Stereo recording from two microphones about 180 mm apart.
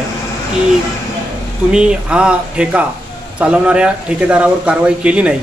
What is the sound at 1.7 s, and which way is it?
Speech, 5° right (ahead or behind).